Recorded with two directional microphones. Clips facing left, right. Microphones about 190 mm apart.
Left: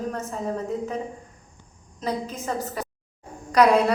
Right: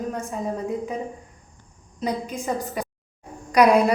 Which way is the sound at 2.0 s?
15° right (ahead or behind).